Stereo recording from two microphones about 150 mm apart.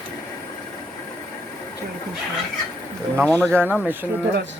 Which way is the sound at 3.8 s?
10° right (ahead or behind).